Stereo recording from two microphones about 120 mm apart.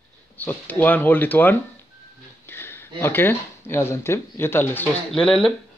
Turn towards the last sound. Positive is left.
turn(degrees=5)  # may be behind; listen again after turning